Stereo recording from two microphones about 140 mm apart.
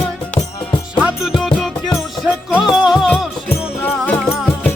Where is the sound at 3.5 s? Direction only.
10° left (ahead or behind).